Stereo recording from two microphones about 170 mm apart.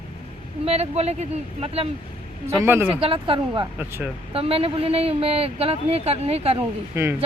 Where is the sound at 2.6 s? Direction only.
15° right (ahead or behind).